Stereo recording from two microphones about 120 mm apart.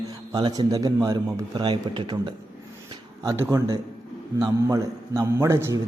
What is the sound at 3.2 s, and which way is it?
Speech, 25° right (ahead or behind).